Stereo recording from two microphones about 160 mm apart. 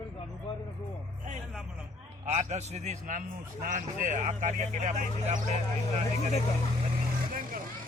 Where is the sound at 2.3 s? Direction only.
45° right (ahead or behind).